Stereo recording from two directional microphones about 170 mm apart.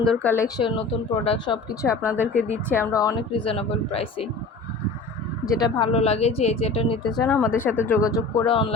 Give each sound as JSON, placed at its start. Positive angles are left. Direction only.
{"t": 0.0, "sound": "speech", "side_deg": 5}
{"t": 1.2, "sound": "speech", "side_deg": 35}
{"t": 1.8, "sound": "speech", "side_deg": 20}
{"t": 2.2, "sound": "speech", "side_deg": 45}
{"t": 2.6, "sound": "speech", "side_deg": 15}
{"t": 5.5, "sound": "speech", "side_deg": 25}
{"t": 5.9, "sound": "speech", "side_deg": 40}
{"t": 7.5, "sound": "speech", "side_deg": 15}